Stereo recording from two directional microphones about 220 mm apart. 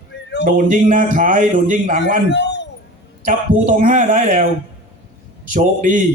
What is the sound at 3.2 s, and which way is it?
A man's voice, 35° right (ahead or behind).